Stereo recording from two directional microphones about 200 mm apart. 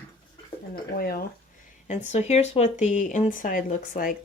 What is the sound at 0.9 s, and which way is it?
Speech, 50° left (ahead or behind).